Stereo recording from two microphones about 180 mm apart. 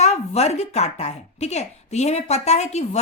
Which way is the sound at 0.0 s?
40° left (ahead or behind).